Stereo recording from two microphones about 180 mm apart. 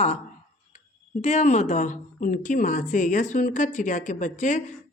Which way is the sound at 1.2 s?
40° left (ahead or behind).